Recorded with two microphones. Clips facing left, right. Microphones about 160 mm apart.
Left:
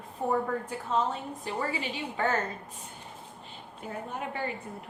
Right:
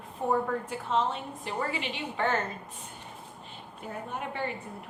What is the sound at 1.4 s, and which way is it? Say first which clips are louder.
Speech: even; 40° left (ahead or behind).